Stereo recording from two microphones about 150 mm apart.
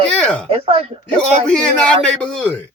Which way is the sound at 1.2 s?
5° left (ahead or behind).